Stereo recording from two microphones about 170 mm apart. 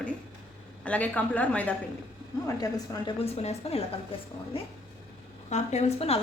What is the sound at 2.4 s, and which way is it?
Speech, 20° left (ahead or behind).